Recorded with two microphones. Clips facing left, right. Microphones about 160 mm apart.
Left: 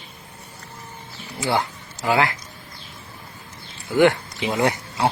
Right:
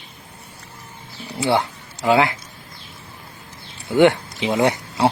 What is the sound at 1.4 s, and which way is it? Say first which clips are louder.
Speech: right 3 dB; 20° right (ahead or behind).